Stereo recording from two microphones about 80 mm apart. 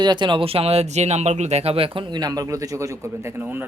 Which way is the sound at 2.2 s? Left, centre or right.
Right.